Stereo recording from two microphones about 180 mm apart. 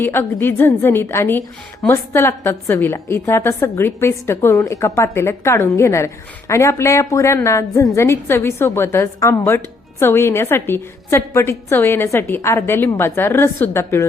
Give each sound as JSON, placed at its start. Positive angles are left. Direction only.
{"t": 0.0, "sound": "a woman's voice", "side_deg": 10}